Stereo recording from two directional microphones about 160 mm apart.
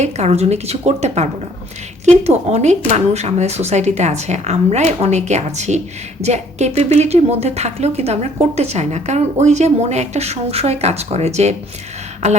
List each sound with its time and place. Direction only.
0.0 s a woman's voice: 40° right (ahead or behind)